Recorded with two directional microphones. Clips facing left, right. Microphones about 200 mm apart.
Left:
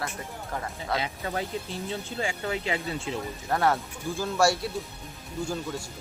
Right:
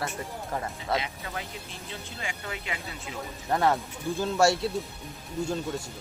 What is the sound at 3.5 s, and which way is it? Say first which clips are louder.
Speech: even; 15° right (ahead or behind).